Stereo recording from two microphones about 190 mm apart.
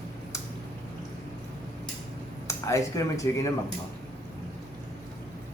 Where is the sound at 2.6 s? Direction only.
15° left (ahead or behind).